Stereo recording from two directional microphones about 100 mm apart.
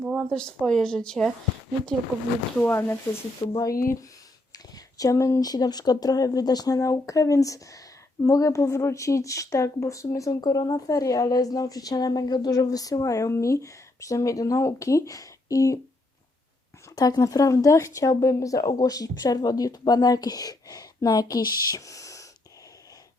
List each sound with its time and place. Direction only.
0.0 s a sound: 5° right (ahead or behind)
0.3 s a woman's voice: 5° left (ahead or behind)
2.6 s speech: 20° left (ahead or behind)
3.6 s speech: 35° left (ahead or behind)
16.9 s speech: 40° left (ahead or behind)